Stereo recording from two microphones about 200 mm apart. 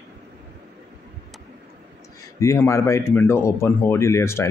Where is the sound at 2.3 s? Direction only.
15° left (ahead or behind).